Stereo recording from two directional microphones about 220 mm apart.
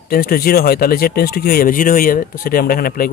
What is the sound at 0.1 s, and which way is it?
Speech, 40° left (ahead or behind).